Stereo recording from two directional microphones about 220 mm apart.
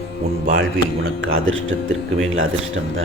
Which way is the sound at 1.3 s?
65° right (ahead or behind).